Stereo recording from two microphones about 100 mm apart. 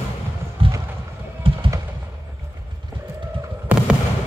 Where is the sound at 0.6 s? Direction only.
65° right (ahead or behind).